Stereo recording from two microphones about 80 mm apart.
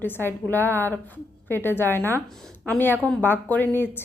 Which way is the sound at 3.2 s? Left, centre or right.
Left.